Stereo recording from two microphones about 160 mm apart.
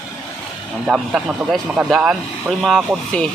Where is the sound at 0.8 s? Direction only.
Centre (ahead or behind).